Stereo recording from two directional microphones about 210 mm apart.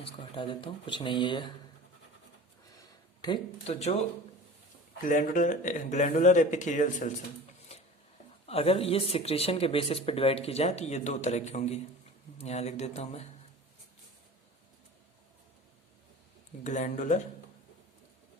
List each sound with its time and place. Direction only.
0.0 s speech: 25° left (ahead or behind)
3.2 s speech: 20° left (ahead or behind)
5.0 s speech: 40° left (ahead or behind)
8.4 s speech: 30° left (ahead or behind)
16.6 s speech: 35° left (ahead or behind)